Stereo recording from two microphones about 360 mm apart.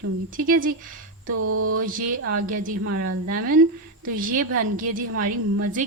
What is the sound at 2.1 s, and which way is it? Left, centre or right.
Speech, right.